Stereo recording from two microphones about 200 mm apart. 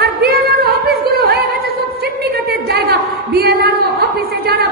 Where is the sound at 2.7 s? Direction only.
50° right (ahead or behind).